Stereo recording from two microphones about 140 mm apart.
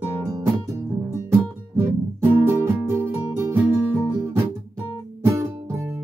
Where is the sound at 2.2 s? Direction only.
15° right (ahead or behind).